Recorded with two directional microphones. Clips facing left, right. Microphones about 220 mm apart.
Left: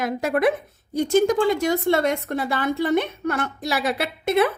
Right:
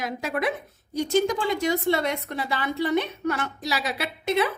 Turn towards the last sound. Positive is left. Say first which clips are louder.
# left 4 dB
turn(degrees=55)  # may be behind; listen again after turning